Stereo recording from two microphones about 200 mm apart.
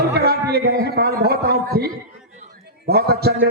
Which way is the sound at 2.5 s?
50° right (ahead or behind).